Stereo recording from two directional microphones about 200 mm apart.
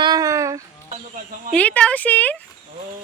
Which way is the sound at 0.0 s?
20° right (ahead or behind).